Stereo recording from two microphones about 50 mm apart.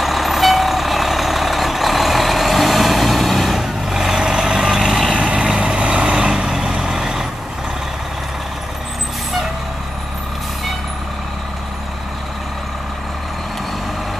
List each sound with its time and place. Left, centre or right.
0.0 s vehicle: centre
5.1 s vehicle: right